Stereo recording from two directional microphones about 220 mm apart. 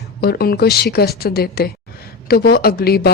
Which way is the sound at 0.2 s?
45° left (ahead or behind).